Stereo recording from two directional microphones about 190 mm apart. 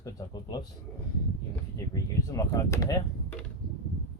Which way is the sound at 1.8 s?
15° left (ahead or behind).